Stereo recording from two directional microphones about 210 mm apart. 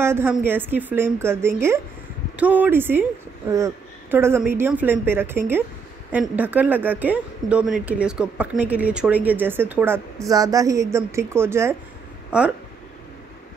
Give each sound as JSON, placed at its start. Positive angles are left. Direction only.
{"t": 0.0, "sound": "a woman's voice", "side_deg": -10}